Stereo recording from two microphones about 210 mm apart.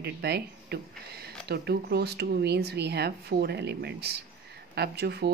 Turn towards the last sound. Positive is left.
turn(degrees=-50)  # may be behind; listen again after turning